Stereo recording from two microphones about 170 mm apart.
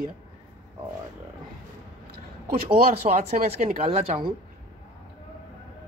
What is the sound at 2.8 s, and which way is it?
Speech, 55° right (ahead or behind).